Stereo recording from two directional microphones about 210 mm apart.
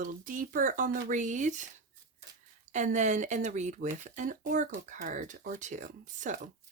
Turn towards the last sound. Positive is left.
turn(degrees=-40)  # may be behind; listen again after turning